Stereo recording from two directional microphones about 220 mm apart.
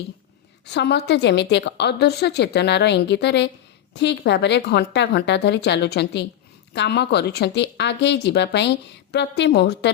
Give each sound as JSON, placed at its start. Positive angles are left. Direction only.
{"t": 0.6, "sound": "a woman's voice", "side_deg": 50}